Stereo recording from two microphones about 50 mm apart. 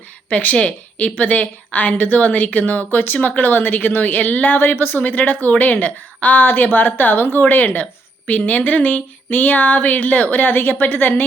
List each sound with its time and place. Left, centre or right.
0.3 s a woman's voice: left